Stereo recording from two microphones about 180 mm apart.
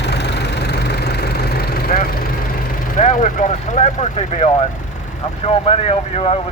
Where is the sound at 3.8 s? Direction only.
45° left (ahead or behind).